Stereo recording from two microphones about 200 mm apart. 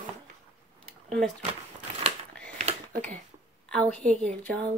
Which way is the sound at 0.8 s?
5° left (ahead or behind).